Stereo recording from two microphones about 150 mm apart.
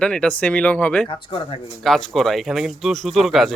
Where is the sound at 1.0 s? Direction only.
35° left (ahead or behind).